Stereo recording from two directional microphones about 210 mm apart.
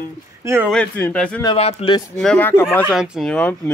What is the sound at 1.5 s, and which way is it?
Speech, 30° left (ahead or behind).